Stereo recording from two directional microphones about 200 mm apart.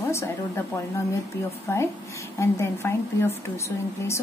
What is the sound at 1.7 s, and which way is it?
A woman's voice, 10° left (ahead or behind).